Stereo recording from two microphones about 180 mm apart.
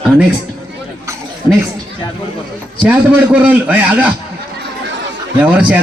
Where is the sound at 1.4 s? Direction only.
25° left (ahead or behind).